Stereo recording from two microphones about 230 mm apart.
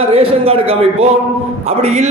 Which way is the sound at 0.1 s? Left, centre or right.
Right.